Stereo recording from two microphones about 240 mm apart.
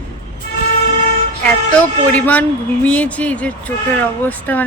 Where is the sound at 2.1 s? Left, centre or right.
Centre.